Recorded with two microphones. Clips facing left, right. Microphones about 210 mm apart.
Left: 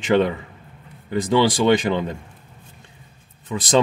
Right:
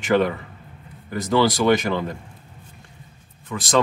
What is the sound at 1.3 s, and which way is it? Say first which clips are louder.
Speech: left 1 dB; 20° left (ahead or behind).